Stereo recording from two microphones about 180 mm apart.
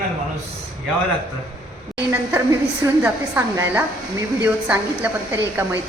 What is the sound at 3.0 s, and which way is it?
A woman's voice, 10° right (ahead or behind).